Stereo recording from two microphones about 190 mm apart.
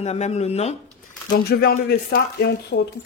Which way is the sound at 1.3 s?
55° left (ahead or behind).